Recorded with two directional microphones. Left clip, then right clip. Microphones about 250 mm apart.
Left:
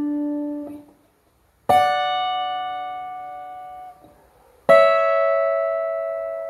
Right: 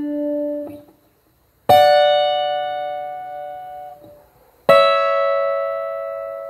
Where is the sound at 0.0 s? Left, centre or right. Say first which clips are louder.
Right 2 dB; right.